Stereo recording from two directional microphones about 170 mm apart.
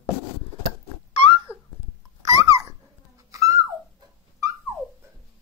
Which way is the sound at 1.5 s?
5° right (ahead or behind).